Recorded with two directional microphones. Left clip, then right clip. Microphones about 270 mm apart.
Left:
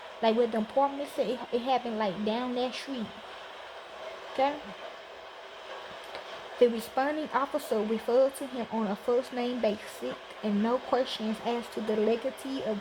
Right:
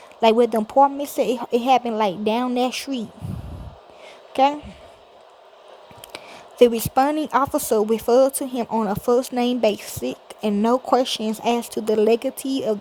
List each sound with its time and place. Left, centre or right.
0.2 s speech: right
6.6 s speech: right